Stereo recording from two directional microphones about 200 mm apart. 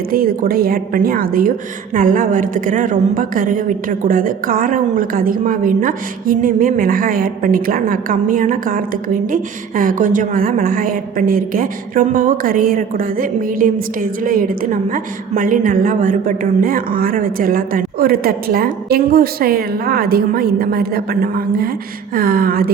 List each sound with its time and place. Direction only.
0.1 s a woman's voice: 45° right (ahead or behind)